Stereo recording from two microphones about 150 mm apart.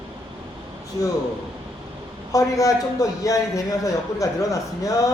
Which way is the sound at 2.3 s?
20° left (ahead or behind).